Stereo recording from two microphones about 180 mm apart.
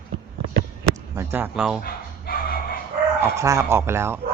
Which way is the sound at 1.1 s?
15° right (ahead or behind).